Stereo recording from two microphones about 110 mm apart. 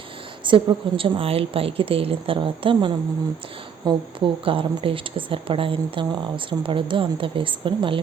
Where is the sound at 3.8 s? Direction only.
40° right (ahead or behind).